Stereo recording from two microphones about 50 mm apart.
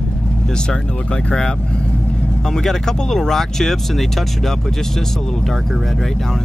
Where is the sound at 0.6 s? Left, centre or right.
Centre.